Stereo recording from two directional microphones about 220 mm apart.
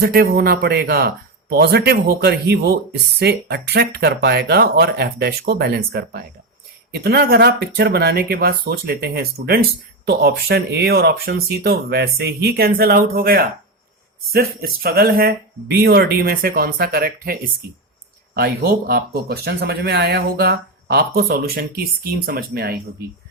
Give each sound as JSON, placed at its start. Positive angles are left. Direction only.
{"t": 0.0, "sound": "speech", "side_deg": -45}